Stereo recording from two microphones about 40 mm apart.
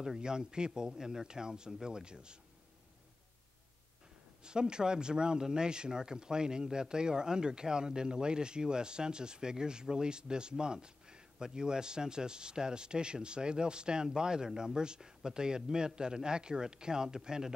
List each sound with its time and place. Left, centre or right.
0.0 s speech: centre
4.5 s speech: centre